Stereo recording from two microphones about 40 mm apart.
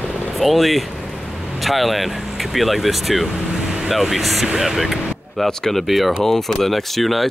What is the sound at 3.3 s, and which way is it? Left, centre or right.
Vehicle, centre.